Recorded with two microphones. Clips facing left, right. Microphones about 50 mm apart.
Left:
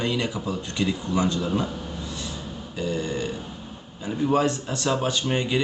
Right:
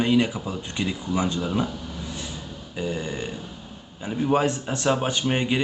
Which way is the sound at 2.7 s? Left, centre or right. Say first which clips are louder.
Left 1 dB; centre.